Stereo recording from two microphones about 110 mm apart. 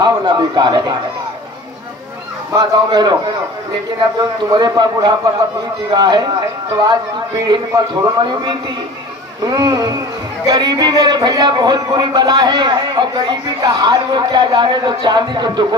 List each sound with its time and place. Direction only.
0.0 s speech: 40° right (ahead or behind)
2.5 s speech: 40° right (ahead or behind)
4.5 s speech: 40° right (ahead or behind)
7.7 s speech: 35° right (ahead or behind)